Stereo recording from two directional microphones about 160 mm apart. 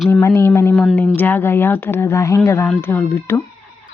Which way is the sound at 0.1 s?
15° left (ahead or behind).